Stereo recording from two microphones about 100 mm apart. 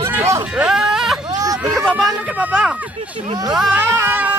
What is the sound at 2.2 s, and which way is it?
Speech, 15° right (ahead or behind).